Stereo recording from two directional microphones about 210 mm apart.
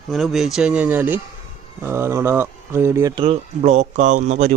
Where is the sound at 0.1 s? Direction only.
Centre (ahead or behind).